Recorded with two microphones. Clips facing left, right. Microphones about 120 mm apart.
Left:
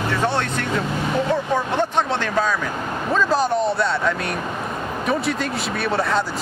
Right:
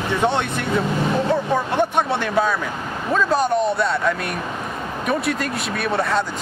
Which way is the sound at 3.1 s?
Centre (ahead or behind).